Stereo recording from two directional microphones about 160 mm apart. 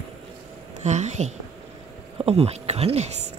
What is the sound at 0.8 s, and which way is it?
Speech, 45° right (ahead or behind).